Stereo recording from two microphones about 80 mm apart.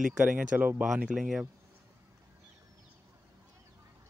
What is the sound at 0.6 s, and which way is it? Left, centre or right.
Speech, right.